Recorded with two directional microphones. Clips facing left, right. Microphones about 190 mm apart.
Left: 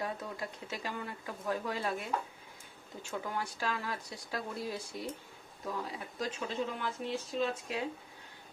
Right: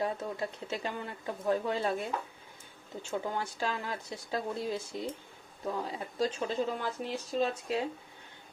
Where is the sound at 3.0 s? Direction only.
25° right (ahead or behind).